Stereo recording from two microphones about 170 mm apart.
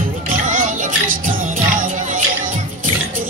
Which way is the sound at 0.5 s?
50° right (ahead or behind).